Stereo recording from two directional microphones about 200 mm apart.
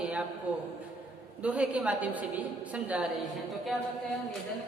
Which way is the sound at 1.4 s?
5° right (ahead or behind).